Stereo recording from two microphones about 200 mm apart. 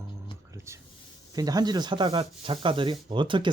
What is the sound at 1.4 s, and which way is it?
Speech, 20° right (ahead or behind).